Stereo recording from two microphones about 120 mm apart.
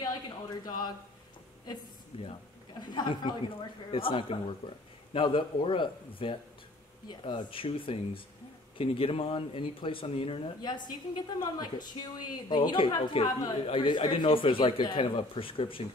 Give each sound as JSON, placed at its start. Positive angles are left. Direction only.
{"t": 2.1, "sound": "speech", "side_deg": 45}